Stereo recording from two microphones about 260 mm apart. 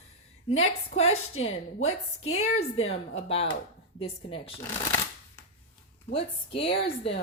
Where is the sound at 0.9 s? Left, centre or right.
Left.